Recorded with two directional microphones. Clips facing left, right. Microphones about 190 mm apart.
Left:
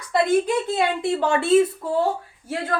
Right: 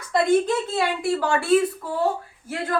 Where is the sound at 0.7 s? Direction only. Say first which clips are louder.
Left 1 dB; 20° left (ahead or behind).